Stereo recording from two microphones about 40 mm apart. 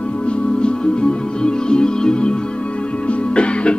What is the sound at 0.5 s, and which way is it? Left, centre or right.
Music, left.